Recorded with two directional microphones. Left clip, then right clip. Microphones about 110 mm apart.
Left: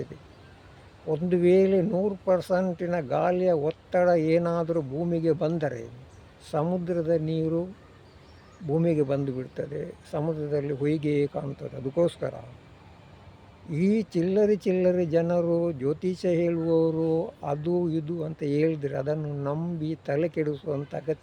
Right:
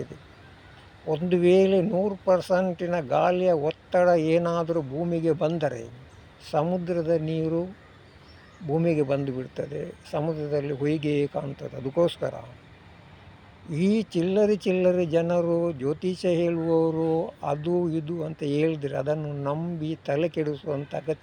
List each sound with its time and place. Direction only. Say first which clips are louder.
1.1 s a man's voice: right 1 dB; 15° left (ahead or behind)
8.7 s speech: right 1 dB; 20° left (ahead or behind)
13.7 s speech: right 1 dB; 20° left (ahead or behind)